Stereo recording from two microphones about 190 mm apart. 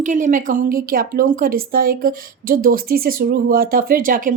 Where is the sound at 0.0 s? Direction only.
40° right (ahead or behind).